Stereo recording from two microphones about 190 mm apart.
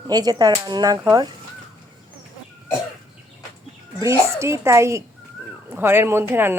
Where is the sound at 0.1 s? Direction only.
20° right (ahead or behind).